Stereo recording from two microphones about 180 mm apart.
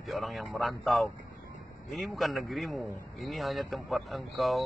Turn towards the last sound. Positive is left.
turn(degrees=0)  # may be behind; listen again after turning